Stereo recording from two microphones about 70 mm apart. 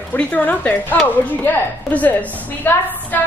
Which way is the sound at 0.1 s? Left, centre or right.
Left.